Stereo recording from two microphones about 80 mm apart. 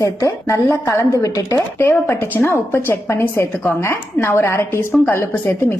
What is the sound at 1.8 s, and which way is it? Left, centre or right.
A woman's voice, left.